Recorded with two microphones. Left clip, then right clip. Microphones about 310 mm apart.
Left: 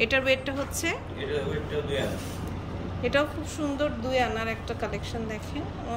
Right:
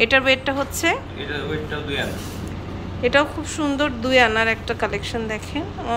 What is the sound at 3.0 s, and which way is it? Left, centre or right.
A woman's voice, centre.